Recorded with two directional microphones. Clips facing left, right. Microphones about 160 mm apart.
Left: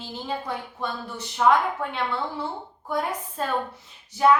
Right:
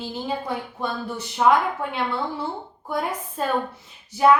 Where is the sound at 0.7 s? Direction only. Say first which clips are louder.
Right 3 dB; 10° right (ahead or behind).